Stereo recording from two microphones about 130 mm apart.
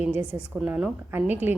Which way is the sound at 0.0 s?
15° right (ahead or behind).